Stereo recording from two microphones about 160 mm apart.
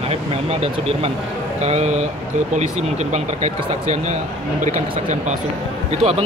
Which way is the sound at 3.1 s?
45° right (ahead or behind).